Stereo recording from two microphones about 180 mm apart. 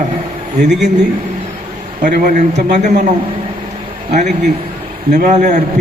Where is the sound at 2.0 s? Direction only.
50° right (ahead or behind).